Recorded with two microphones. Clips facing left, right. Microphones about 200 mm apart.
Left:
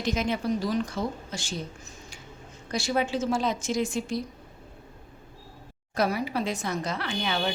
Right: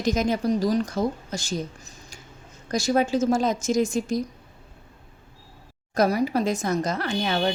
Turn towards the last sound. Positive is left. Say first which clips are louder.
# right 5 dB
turn(degrees=-40)  # may be behind; listen again after turning